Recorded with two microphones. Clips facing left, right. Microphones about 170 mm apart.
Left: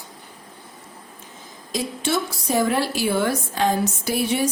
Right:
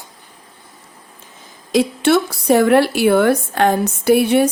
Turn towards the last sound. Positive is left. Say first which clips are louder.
# right 9 dB
turn(degrees=-60)  # may be behind; listen again after turning